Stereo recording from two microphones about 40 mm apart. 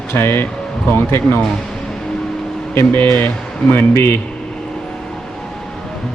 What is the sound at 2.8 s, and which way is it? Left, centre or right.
Speech, left.